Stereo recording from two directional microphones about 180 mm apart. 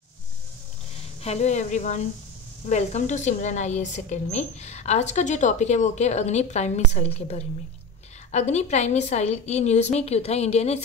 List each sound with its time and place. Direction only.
1.2 s speech: 40° left (ahead or behind)